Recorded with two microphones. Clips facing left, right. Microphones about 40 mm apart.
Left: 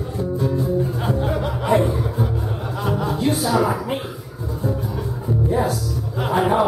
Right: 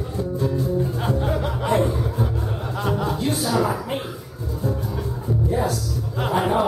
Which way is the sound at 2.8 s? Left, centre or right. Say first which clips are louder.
Left 2 dB; centre.